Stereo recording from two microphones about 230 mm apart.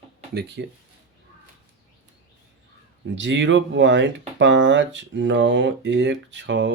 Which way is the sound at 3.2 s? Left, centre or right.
Right.